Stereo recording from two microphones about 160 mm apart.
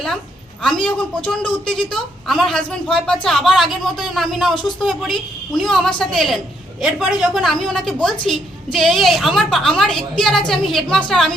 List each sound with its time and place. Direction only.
0.6 s a woman's voice: 5° left (ahead or behind)